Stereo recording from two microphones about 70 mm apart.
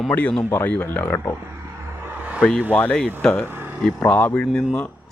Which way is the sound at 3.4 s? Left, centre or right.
Right.